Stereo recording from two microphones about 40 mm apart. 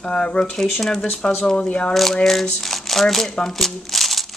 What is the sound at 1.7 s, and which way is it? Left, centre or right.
Speech, left.